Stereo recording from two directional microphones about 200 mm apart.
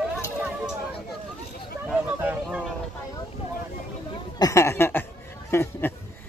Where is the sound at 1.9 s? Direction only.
5° right (ahead or behind).